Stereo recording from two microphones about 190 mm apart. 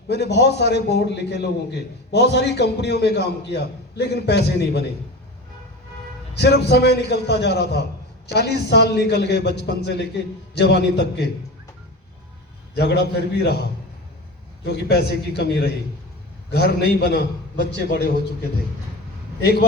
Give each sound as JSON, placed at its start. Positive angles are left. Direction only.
{"t": 0.1, "sound": "a man's voice", "side_deg": 60}
{"t": 6.3, "sound": "a man's voice", "side_deg": 60}
{"t": 12.7, "sound": "a man's voice", "side_deg": 60}
{"t": 19.4, "sound": "a man's voice", "side_deg": 60}